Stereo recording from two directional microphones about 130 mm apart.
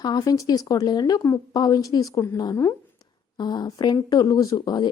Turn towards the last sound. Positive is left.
turn(degrees=35)  # may be behind; listen again after turning